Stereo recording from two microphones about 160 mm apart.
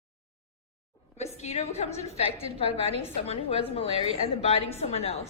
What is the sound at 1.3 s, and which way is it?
A woman's voice, 45° left (ahead or behind).